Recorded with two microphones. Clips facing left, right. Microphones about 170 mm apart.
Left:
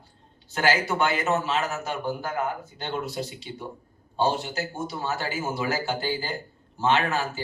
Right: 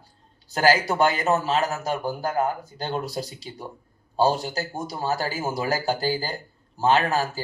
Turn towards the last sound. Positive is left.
turn(degrees=-35)  # may be behind; listen again after turning